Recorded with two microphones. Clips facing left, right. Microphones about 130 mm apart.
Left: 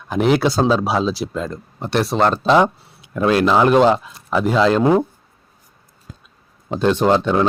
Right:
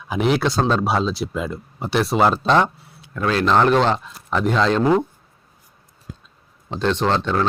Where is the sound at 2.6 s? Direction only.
15° left (ahead or behind).